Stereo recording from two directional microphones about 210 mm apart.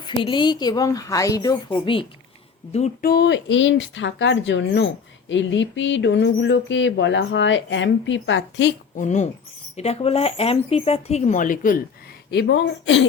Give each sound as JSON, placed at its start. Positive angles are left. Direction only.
{"t": 0.0, "sound": "speech", "side_deg": 20}
{"t": 3.0, "sound": "speech", "side_deg": 50}
{"t": 9.0, "sound": "speech", "side_deg": 35}
{"t": 12.3, "sound": "speech", "side_deg": 55}